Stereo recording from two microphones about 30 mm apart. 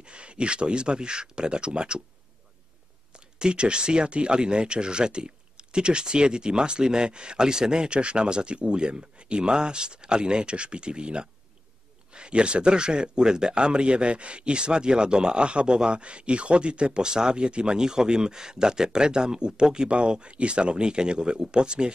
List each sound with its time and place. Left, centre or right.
0.0 s speech: right
3.3 s speech: right
17.0 s speech: right
17.4 s speech: right